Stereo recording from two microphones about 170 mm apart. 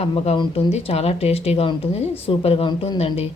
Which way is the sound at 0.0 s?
35° left (ahead or behind).